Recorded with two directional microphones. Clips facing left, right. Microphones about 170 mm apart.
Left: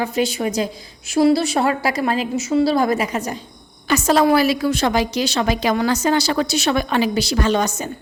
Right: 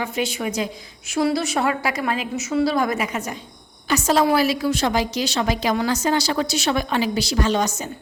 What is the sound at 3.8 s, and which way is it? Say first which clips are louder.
A woman's voice: left 3 dB; 65° left (ahead or behind).